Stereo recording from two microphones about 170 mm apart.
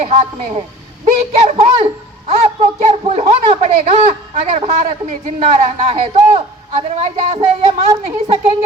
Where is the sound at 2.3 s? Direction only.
40° right (ahead or behind).